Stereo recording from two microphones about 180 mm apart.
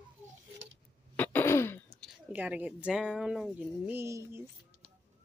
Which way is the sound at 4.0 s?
15° right (ahead or behind).